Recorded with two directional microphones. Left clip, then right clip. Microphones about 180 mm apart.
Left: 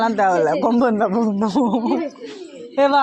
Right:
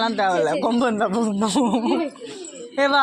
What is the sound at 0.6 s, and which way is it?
Speech, 35° left (ahead or behind).